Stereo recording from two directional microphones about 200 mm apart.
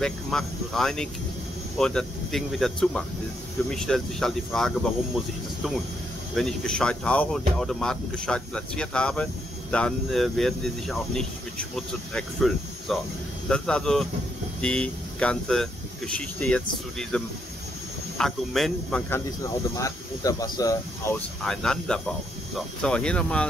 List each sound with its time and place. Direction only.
0.0 s speech: centre (ahead or behind)
21.5 s speech: 5° left (ahead or behind)